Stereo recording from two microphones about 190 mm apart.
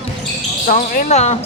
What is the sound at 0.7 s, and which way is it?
Speech, 45° left (ahead or behind).